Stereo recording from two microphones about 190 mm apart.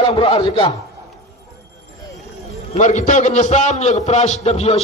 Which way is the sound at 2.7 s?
40° left (ahead or behind).